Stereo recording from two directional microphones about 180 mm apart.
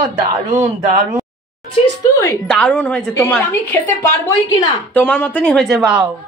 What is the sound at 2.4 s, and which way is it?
A woman's voice, 5° left (ahead or behind).